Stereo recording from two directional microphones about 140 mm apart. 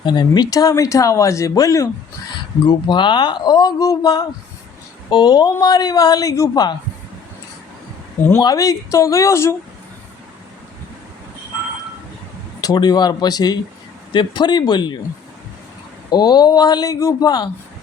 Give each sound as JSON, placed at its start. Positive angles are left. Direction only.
{"t": 0.0, "sound": "speech", "side_deg": 30}
{"t": 8.4, "sound": "speech", "side_deg": 25}
{"t": 12.6, "sound": "speech", "side_deg": 30}
{"t": 16.0, "sound": "speech", "side_deg": 30}